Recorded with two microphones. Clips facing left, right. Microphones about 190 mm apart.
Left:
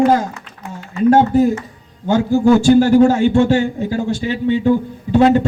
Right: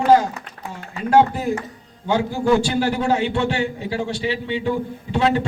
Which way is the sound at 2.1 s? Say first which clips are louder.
Left 6 dB; 45° left (ahead or behind).